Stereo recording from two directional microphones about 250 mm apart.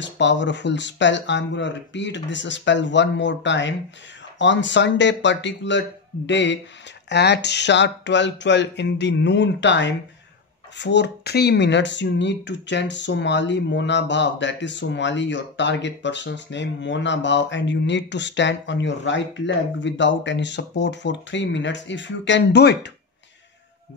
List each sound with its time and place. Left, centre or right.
0.0 s speech: left